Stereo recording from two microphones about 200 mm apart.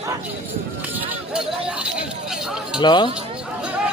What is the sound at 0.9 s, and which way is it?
Chink, 5° right (ahead or behind).